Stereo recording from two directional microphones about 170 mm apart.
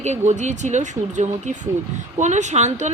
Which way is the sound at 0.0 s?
40° right (ahead or behind).